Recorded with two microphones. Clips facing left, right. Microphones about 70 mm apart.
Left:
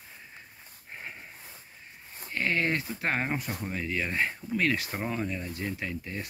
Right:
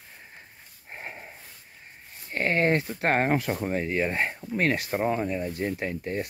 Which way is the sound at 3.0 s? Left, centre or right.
Right.